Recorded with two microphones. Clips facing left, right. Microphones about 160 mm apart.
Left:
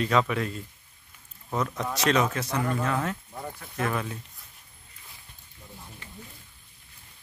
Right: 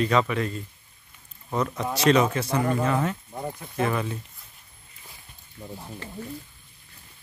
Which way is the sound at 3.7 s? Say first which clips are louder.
Right 3 dB; centre (ahead or behind).